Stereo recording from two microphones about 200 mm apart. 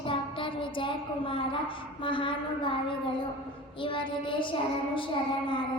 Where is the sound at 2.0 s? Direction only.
25° left (ahead or behind).